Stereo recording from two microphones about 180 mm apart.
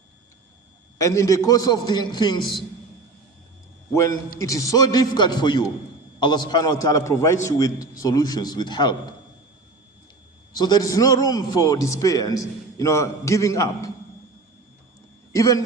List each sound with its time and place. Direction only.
0.9 s a man's voice: 15° left (ahead or behind)
4.4 s a man's voice: 20° left (ahead or behind)
10.5 s a man's voice: 20° left (ahead or behind)
15.3 s a man's voice: 20° left (ahead or behind)